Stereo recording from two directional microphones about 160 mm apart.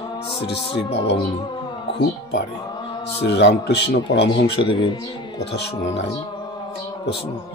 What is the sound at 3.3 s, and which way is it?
Speech, 90° left.